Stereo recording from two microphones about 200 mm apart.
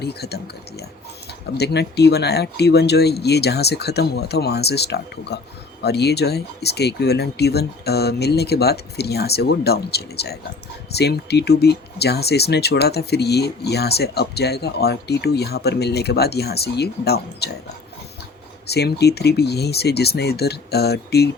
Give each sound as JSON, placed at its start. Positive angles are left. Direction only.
{"t": 0.0, "sound": "speech", "side_deg": 55}
{"t": 18.7, "sound": "speech", "side_deg": 55}